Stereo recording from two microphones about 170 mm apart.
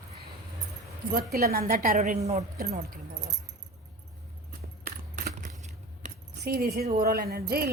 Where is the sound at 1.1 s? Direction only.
65° right (ahead or behind).